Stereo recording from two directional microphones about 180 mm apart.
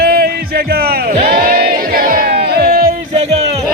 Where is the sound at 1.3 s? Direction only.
60° right (ahead or behind).